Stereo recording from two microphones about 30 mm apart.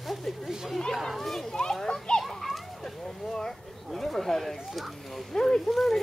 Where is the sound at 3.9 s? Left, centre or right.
Centre.